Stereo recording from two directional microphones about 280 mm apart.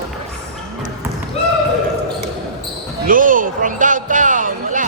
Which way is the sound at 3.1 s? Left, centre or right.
Right.